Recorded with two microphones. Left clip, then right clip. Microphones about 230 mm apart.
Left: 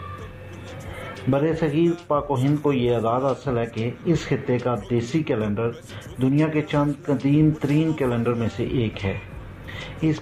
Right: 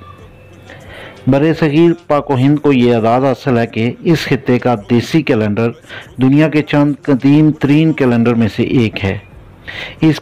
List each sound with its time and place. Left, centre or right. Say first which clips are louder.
1.3 s a man's voice: right 10 dB; right